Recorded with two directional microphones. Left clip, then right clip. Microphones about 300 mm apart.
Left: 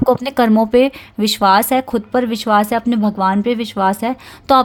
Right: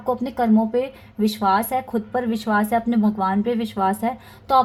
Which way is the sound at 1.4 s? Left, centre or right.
Left.